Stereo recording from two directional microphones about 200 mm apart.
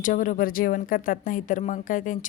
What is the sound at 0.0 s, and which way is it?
A woman's voice, 40° left (ahead or behind).